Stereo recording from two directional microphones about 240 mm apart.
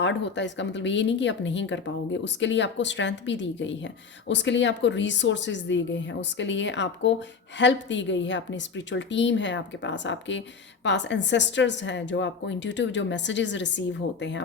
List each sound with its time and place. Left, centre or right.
0.0 s speech: left